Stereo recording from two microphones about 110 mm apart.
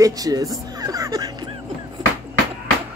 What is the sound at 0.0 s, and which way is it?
Speech, 35° right (ahead or behind).